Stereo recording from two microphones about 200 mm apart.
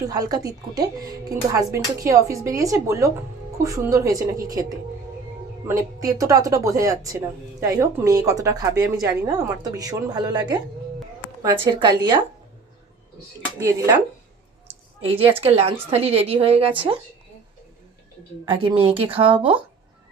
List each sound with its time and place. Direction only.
0.0 s a woman's voice: 20° right (ahead or behind)
5.6 s a woman's voice: 15° right (ahead or behind)
11.7 s a woman's voice: 25° right (ahead or behind)
13.6 s a woman's voice: 15° right (ahead or behind)
15.0 s a woman's voice: 25° right (ahead or behind)
18.4 s a woman's voice: 25° right (ahead or behind)